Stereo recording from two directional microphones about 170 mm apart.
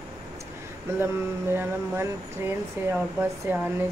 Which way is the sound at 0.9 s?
15° right (ahead or behind).